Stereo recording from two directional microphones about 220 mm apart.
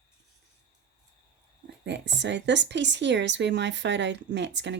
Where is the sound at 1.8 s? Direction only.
50° right (ahead or behind).